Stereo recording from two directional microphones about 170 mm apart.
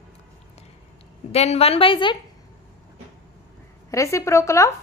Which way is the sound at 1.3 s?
40° left (ahead or behind).